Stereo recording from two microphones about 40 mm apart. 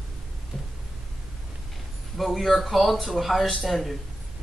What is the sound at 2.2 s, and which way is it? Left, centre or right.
Speech, centre.